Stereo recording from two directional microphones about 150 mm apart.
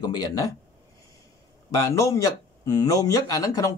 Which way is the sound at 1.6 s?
20° left (ahead or behind).